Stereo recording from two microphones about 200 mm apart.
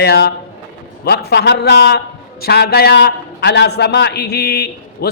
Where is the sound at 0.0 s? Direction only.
55° left (ahead or behind).